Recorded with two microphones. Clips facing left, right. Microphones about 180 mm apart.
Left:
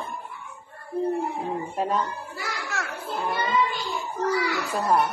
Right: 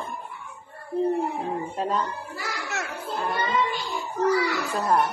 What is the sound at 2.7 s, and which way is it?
Children playing, 20° right (ahead or behind).